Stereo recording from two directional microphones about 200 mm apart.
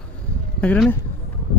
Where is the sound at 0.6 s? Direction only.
5° left (ahead or behind).